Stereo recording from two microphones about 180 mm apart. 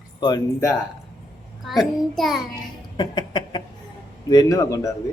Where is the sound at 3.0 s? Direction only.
25° left (ahead or behind).